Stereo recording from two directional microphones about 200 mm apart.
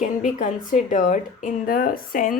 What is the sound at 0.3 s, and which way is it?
Speech, 40° left (ahead or behind).